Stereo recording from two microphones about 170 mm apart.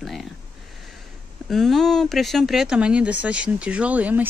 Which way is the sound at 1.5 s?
Centre (ahead or behind).